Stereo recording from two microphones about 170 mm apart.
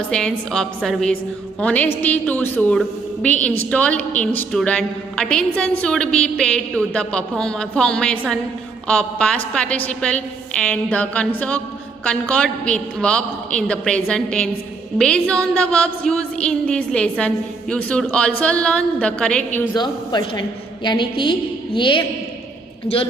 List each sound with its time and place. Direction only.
0.1 s a woman's voice: 5° left (ahead or behind)
19.7 s speech: 25° left (ahead or behind)